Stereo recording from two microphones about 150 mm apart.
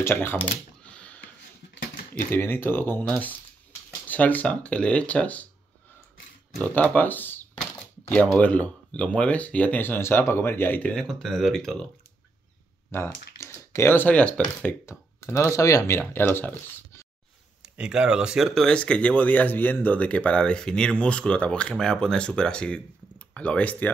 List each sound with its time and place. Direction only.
0.0 s computer keyboard: 15° left (ahead or behind)
2.3 s speech: 15° left (ahead or behind)
6.6 s speech: 10° left (ahead or behind)
12.9 s speech: 15° left (ahead or behind)
17.6 s speech: 5° right (ahead or behind); by 23.9 s 10° left (ahead or behind)